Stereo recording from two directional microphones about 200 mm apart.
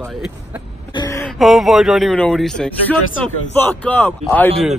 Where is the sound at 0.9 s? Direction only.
20° left (ahead or behind).